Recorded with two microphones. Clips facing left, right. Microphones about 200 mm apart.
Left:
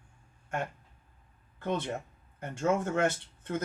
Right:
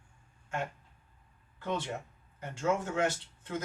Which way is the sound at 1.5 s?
50° left (ahead or behind).